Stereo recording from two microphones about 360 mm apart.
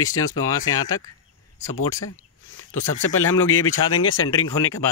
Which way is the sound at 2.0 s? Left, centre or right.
Left.